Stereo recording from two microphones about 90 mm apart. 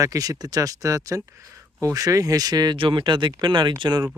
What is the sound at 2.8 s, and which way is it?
Speech, 75° right (ahead or behind).